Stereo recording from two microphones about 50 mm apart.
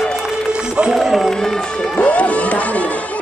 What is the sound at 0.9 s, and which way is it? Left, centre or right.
Run, centre.